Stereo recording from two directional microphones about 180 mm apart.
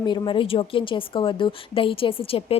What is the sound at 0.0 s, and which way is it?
A woman's voice, 25° left (ahead or behind).